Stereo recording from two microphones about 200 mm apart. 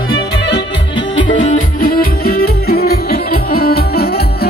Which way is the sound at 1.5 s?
45° left (ahead or behind).